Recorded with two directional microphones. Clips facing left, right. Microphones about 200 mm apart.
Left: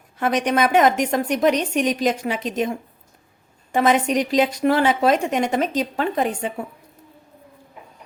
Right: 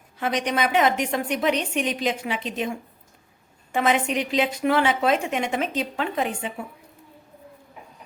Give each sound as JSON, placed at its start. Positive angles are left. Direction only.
{"t": 0.2, "sound": "a woman's voice", "side_deg": 50}
{"t": 3.7, "sound": "a woman's voice", "side_deg": 40}